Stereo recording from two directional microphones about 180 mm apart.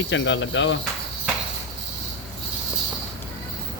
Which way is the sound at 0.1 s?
90° left.